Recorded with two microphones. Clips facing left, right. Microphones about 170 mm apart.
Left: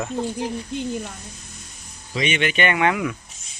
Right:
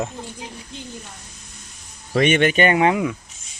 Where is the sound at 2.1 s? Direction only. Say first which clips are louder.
Right 6 dB; 55° right (ahead or behind); by 3.0 s 30° right (ahead or behind).